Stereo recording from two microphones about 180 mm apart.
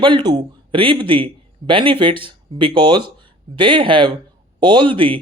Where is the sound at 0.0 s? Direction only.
25° right (ahead or behind).